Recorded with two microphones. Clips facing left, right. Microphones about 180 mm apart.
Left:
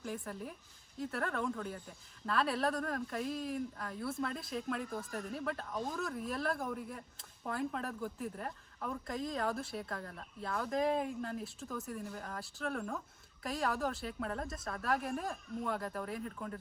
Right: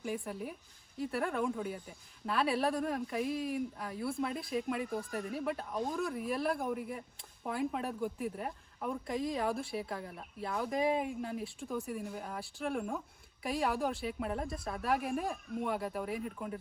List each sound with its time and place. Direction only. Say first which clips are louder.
0.0 s speech: right 4 dB; 5° right (ahead or behind)
13.4 s speech: right 3 dB; 5° right (ahead or behind)